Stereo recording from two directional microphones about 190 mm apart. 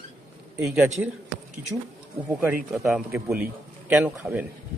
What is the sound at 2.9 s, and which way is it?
Speech, centre (ahead or behind).